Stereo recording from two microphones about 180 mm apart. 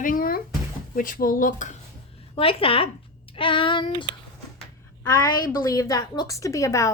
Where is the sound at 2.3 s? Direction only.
30° left (ahead or behind).